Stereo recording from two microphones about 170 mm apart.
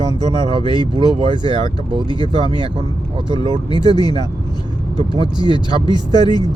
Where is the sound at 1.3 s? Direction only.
25° left (ahead or behind).